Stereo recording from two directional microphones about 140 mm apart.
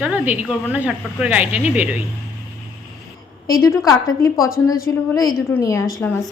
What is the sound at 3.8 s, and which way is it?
Speech, 25° left (ahead or behind).